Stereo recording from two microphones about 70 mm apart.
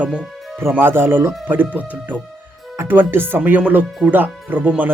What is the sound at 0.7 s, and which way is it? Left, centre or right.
Speech, right.